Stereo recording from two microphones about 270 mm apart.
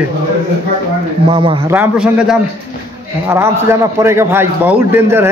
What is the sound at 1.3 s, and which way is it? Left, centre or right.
Speech, centre.